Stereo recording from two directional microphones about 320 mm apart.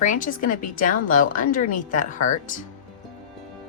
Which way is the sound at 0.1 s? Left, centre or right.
Left.